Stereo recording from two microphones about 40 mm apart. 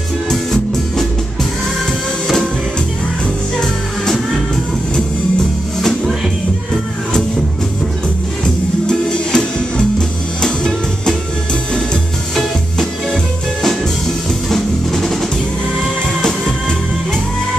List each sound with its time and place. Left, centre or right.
0.3 s music: centre
8.8 s music: left
13.1 s music: centre
14.5 s drum: centre